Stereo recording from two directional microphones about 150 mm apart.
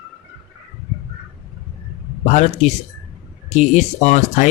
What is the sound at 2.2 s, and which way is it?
Speech, 50° left (ahead or behind).